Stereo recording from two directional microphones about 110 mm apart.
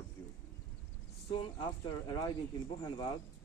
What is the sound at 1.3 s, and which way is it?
Speech, 55° left (ahead or behind).